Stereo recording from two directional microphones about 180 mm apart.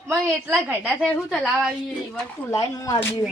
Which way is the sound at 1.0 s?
5° left (ahead or behind).